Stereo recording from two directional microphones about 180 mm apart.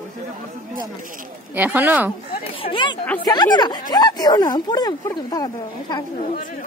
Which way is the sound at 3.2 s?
25° left (ahead or behind).